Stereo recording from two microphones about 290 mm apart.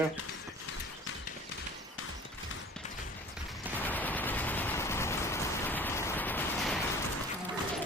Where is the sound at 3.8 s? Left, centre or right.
Centre.